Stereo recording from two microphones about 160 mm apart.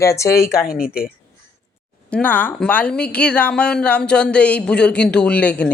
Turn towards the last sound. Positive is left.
turn(degrees=10)  # may be behind; listen again after turning